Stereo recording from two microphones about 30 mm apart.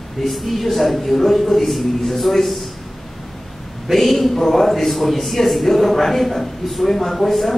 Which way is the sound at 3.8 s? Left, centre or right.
Centre.